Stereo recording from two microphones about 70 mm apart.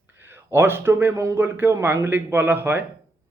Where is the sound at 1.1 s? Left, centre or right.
Right.